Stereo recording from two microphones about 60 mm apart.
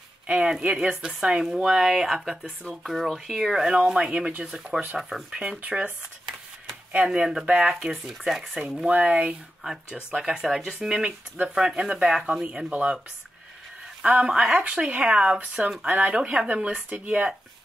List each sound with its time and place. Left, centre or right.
0.3 s speech: centre
7.1 s speech: centre
14.2 s speech: centre